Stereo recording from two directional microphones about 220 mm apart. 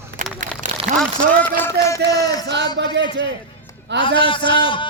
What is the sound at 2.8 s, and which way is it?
Speech, 50° right (ahead or behind).